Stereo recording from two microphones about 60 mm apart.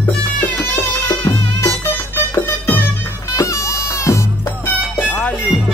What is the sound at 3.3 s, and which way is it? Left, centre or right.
Music, left.